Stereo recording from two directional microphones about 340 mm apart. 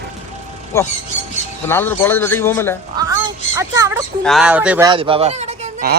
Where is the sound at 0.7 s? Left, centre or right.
Centre.